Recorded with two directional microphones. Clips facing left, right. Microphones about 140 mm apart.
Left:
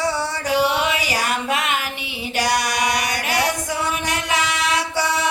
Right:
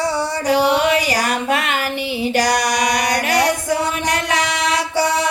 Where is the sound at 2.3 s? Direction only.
40° right (ahead or behind).